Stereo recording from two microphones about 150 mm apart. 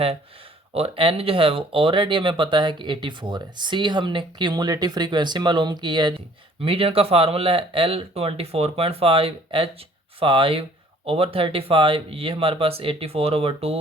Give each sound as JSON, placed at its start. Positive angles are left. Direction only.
{"t": 0.7, "sound": "speech", "side_deg": -40}